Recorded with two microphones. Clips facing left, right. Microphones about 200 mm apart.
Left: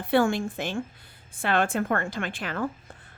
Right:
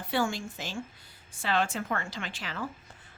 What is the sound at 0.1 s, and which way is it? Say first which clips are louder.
A woman's voice: left 8 dB; 55° left (ahead or behind).